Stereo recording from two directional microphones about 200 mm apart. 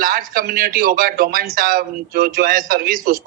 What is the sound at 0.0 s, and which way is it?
A man's voice, 45° right (ahead or behind).